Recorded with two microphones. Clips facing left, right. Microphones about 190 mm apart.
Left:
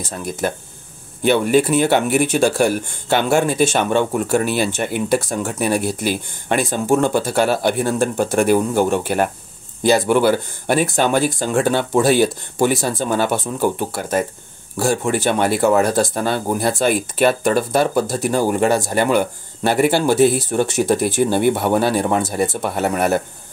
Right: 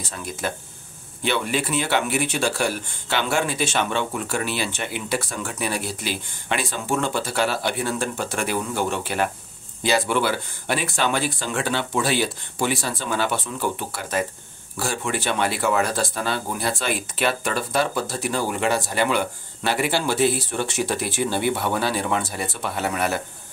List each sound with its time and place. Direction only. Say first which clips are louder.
0.0 s speech: left 6 dB; 45° left (ahead or behind)